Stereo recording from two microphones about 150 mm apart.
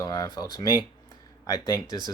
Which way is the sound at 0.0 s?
25° left (ahead or behind).